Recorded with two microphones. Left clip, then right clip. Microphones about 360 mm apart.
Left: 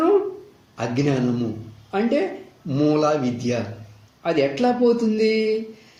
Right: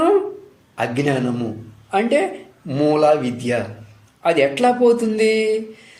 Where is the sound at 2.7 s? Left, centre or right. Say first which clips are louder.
Right 4 dB; right.